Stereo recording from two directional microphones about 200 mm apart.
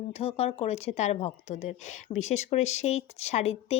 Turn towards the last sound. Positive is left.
turn(degrees=30)  # may be behind; listen again after turning